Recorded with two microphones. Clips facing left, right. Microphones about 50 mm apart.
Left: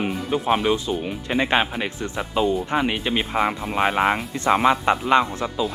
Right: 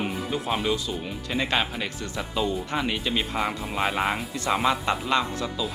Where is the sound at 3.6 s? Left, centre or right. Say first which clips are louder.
Left 5 dB; centre; by 5.6 s left.